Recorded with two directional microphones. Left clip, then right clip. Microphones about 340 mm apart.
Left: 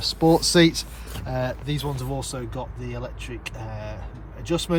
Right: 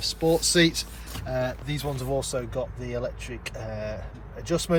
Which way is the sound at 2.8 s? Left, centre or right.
Centre.